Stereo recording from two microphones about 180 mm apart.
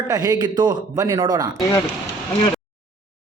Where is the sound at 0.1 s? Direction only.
20° right (ahead or behind).